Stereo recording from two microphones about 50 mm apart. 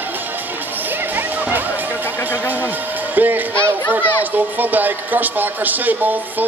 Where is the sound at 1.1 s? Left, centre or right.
Right.